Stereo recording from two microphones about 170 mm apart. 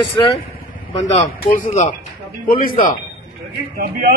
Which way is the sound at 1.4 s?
55° left (ahead or behind).